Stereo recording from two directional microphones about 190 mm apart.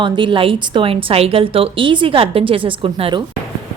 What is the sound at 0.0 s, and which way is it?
Speech, 25° right (ahead or behind).